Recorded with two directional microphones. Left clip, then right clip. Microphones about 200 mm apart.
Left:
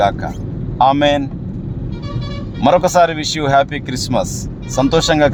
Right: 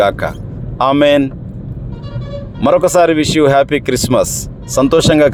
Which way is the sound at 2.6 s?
15° right (ahead or behind).